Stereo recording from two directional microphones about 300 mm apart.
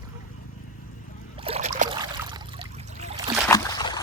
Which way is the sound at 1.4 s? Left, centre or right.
Right.